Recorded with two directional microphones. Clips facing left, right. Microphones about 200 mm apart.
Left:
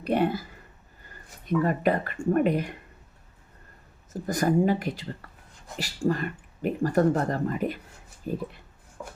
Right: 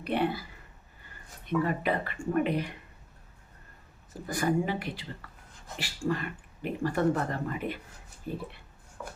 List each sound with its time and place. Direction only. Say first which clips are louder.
0.0 s speech: left 4 dB; 45° left (ahead or behind)
1.5 s speech: left 4 dB; 45° left (ahead or behind)
4.1 s speech: left 4 dB; 45° left (ahead or behind)